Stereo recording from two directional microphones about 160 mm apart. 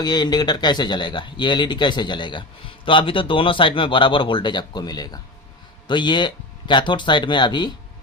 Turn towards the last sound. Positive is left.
turn(degrees=30)  # may be behind; listen again after turning